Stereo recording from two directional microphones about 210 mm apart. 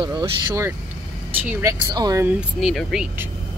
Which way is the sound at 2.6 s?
Centre (ahead or behind).